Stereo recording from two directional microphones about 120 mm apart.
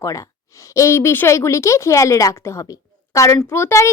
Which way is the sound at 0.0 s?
30° left (ahead or behind).